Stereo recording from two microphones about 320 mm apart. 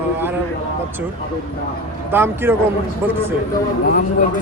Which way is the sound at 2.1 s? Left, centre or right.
Centre.